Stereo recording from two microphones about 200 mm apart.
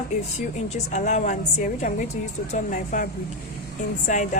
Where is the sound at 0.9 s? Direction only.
35° left (ahead or behind).